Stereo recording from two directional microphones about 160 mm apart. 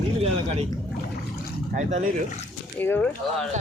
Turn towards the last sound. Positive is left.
turn(degrees=10)  # may be behind; listen again after turning